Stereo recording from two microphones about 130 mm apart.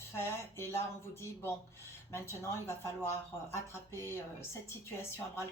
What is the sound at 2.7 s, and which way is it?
Speech, 20° left (ahead or behind).